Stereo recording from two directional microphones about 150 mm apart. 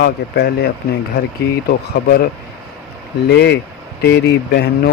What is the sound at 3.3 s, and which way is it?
Speech, 90° left.